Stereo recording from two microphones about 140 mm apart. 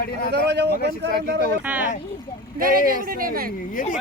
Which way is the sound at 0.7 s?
90° left.